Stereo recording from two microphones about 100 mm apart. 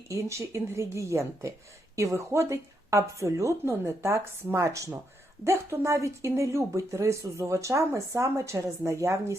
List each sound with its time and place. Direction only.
0.1 s a woman's voice: 30° right (ahead or behind)